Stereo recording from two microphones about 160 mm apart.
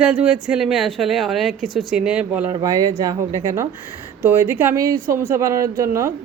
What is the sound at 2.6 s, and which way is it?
Speech, 20° right (ahead or behind).